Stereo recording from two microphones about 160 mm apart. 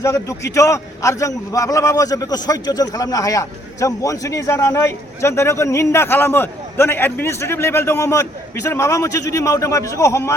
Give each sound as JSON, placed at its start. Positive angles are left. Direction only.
{"t": 0.0, "sound": "a man's voice", "side_deg": 20}